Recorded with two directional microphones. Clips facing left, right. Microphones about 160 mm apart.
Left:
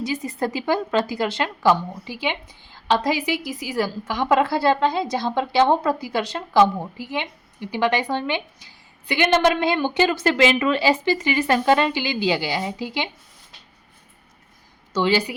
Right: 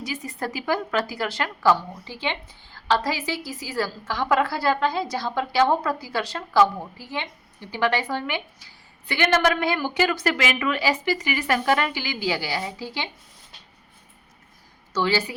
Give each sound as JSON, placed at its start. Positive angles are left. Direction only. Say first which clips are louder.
{"t": 0.0, "sound": "a woman's voice", "louder": "left 6 dB", "side_deg": 20}
{"t": 14.9, "sound": "a woman's voice", "louder": "left 3 dB", "side_deg": 20}